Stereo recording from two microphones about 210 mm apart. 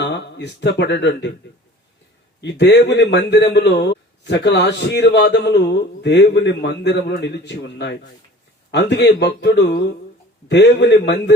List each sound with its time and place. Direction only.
0.0 s speech: 55° left (ahead or behind)
2.4 s a man's voice: 55° left (ahead or behind)